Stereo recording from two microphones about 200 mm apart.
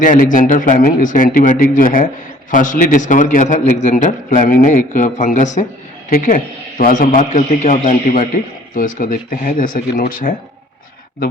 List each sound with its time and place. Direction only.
0.0 s a man's voice: 40° left (ahead or behind)